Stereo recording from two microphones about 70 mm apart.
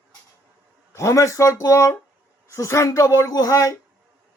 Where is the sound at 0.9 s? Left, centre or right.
Left.